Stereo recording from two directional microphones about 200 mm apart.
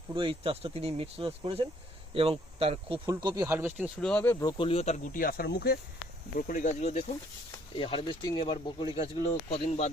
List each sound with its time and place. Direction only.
0.2 s speech: 25° right (ahead or behind); by 3.9 s 10° right (ahead or behind)
4.0 s speech: 10° left (ahead or behind); by 5.8 s 50° left (ahead or behind)
6.3 s speech: 40° left (ahead or behind)
7.8 s speech: 25° left (ahead or behind)
9.3 s speech: 35° left (ahead or behind)